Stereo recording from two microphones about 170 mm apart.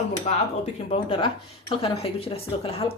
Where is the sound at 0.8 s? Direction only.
35° left (ahead or behind).